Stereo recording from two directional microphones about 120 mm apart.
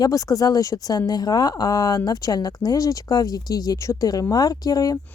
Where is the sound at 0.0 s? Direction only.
30° left (ahead or behind).